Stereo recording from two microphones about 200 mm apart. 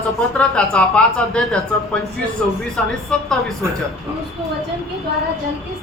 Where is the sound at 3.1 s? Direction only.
5° left (ahead or behind).